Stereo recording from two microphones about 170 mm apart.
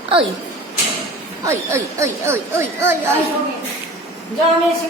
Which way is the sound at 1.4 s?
15° right (ahead or behind).